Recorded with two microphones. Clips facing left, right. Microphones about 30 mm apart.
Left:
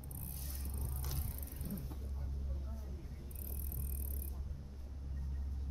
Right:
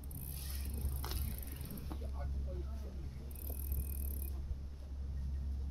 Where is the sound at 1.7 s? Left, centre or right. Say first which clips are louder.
Even; right.